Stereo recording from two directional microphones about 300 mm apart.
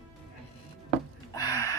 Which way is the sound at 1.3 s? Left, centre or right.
Centre.